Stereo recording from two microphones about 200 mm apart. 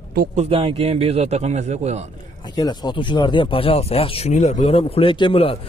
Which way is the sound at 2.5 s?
20° left (ahead or behind).